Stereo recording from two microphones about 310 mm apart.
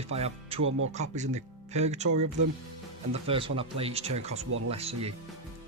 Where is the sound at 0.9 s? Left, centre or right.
Right.